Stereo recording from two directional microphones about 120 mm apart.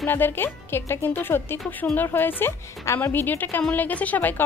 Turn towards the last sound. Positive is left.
turn(degrees=15)  # may be behind; listen again after turning